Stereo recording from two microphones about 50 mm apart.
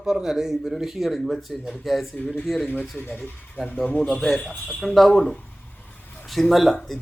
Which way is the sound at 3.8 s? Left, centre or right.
Centre.